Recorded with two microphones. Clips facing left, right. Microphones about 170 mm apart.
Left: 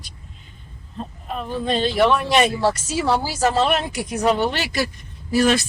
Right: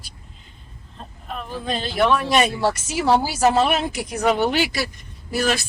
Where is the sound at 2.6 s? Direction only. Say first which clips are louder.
Even; 20° right (ahead or behind).